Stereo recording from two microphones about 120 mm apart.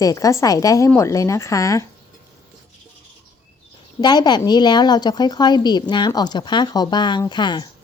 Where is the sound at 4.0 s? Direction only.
35° left (ahead or behind).